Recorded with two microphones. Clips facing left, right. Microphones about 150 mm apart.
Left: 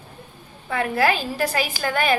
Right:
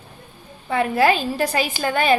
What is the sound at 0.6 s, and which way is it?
A woman's voice, 25° right (ahead or behind).